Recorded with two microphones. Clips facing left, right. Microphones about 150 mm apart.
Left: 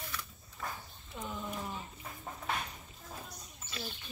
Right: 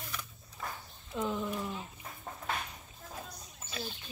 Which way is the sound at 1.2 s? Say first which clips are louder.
Right 6 dB; 90° right.